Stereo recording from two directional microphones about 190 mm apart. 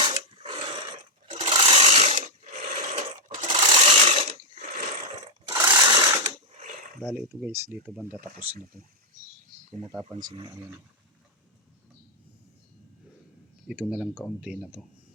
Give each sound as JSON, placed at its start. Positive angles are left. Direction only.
{"t": 0.0, "sound": "dog", "side_deg": -30}
{"t": 1.3, "sound": "sewing machine", "side_deg": -25}
{"t": 3.2, "sound": "sewing machine", "side_deg": -25}
{"t": 5.6, "sound": "mechanisms", "side_deg": -20}
{"t": 7.0, "sound": "speech", "side_deg": -5}
{"t": 13.7, "sound": "speech", "side_deg": -5}